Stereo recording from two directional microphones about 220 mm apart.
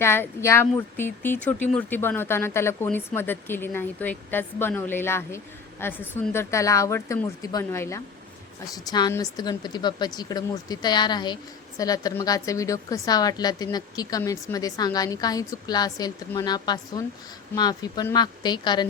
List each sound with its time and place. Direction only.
0.0 s speech: 10° left (ahead or behind)